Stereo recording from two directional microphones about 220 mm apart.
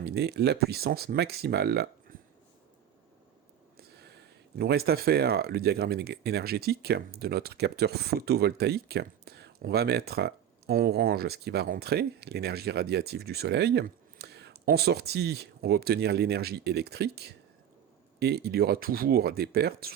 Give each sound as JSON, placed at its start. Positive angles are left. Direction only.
{"t": 0.0, "sound": "speech", "side_deg": -45}
{"t": 3.8, "sound": "speech", "side_deg": -50}